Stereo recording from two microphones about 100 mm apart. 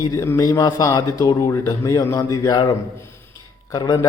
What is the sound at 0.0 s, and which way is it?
A man's voice, 35° left (ahead or behind).